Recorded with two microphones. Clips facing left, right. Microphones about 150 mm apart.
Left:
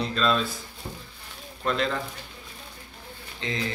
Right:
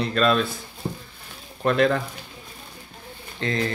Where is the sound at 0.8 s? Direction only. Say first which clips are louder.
Right 8 dB; 30° right (ahead or behind).